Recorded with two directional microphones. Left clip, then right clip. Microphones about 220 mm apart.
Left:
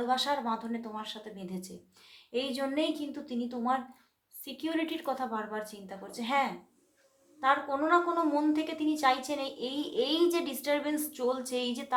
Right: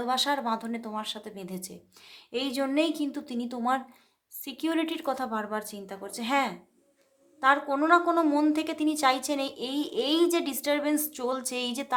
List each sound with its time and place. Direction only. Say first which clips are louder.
0.0 s a woman's voice: right 2 dB; 45° right (ahead or behind)